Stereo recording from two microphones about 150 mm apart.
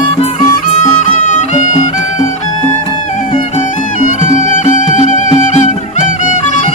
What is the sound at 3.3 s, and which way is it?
Music, 50° left (ahead or behind).